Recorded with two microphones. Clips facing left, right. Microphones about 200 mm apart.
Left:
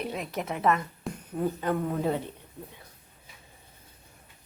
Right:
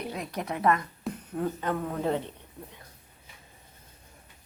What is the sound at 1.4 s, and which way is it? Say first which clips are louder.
Speech: left 2 dB; 10° left (ahead or behind).